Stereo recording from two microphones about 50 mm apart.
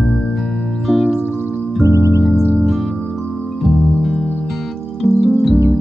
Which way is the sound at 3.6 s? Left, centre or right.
Centre.